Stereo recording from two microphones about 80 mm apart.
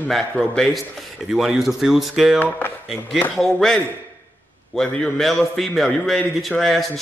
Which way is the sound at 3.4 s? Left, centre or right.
Centre.